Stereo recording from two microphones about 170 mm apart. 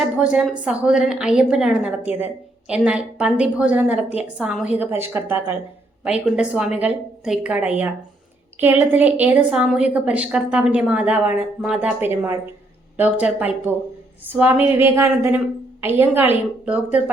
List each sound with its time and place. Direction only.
0.2 s a woman's voice: 5° right (ahead or behind)